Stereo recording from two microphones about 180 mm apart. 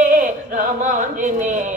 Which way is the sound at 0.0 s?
50° right (ahead or behind).